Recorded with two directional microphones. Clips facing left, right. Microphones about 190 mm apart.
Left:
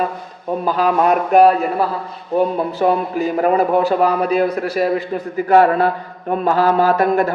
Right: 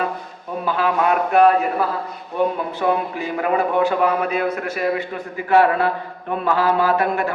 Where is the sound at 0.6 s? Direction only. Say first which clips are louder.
Left 3 dB; 40° left (ahead or behind).